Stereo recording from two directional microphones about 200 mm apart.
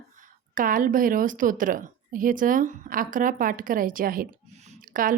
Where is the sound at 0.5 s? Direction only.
45° right (ahead or behind).